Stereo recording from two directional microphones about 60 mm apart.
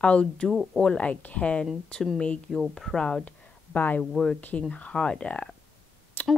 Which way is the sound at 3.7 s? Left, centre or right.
Left.